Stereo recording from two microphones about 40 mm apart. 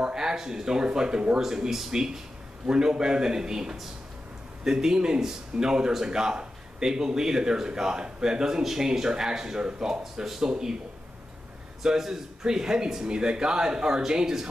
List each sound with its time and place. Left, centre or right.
0.0 s speech: centre
11.8 s speech: centre